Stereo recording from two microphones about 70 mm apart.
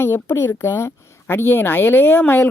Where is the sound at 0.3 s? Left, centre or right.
Left.